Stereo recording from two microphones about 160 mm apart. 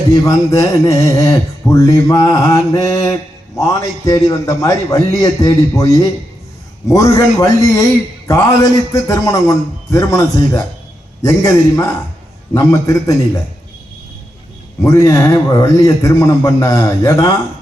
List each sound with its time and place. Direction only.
0.1 s speech: 20° left (ahead or behind)
14.8 s speech: 20° left (ahead or behind)